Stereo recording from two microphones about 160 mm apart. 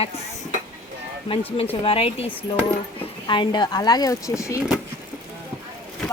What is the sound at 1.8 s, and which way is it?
Speech, 35° left (ahead or behind).